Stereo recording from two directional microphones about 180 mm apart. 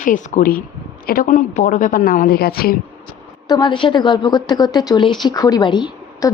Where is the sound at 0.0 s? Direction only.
50° left (ahead or behind).